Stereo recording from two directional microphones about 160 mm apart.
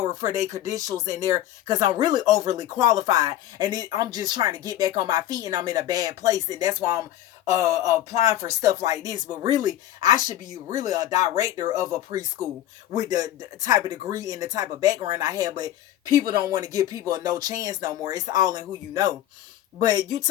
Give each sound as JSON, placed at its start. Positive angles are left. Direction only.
{"t": 0.0, "sound": "speech", "side_deg": -20}